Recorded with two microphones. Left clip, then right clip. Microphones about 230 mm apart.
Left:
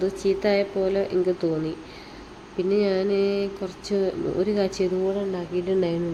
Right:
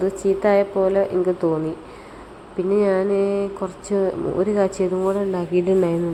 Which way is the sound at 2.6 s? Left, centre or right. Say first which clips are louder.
Right 4 dB; right.